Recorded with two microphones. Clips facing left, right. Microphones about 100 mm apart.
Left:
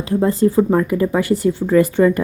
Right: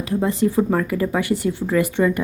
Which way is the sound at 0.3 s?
35° left (ahead or behind).